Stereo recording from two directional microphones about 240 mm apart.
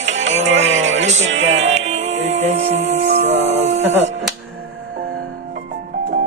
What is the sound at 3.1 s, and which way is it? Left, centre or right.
Music, right.